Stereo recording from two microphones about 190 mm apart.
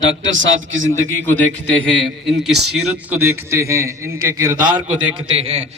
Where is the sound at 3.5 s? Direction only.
15° right (ahead or behind).